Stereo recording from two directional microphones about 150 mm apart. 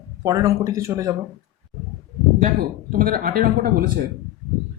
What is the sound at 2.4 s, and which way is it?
Speech, 70° right (ahead or behind).